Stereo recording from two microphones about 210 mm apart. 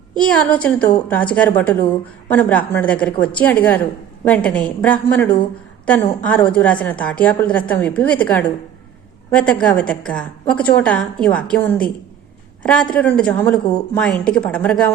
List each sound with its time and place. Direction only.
0.2 s a woman's voice: 5° left (ahead or behind)